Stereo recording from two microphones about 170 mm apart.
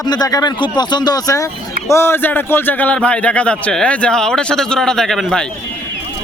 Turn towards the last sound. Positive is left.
turn(degrees=0)  # may be behind; listen again after turning